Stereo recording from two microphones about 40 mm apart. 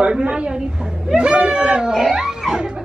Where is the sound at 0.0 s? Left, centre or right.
Right.